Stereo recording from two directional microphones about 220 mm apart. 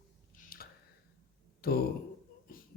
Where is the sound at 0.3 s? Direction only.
40° left (ahead or behind).